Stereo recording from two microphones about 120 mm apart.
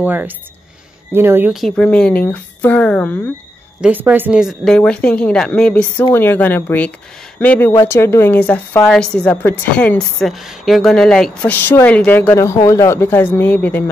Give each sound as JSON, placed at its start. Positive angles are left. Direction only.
{"t": 0.0, "sound": "speech", "side_deg": -15}
{"t": 1.8, "sound": "speech", "side_deg": 10}
{"t": 3.8, "sound": "speech", "side_deg": -15}
{"t": 4.4, "sound": "a woman's voice", "side_deg": -5}
{"t": 4.7, "sound": "a woman's voice", "side_deg": 5}
{"t": 11.5, "sound": "speech", "side_deg": 15}